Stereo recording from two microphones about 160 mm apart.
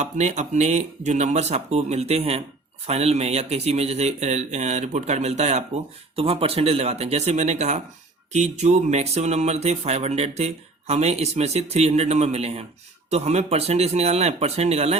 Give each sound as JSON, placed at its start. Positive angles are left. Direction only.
{"t": 0.0, "sound": "speech", "side_deg": -45}